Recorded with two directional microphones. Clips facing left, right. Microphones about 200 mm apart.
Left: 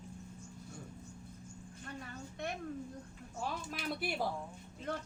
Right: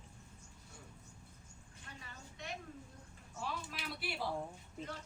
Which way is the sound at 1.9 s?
50° left (ahead or behind).